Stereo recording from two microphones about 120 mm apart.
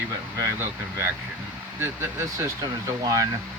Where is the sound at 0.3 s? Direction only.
20° right (ahead or behind).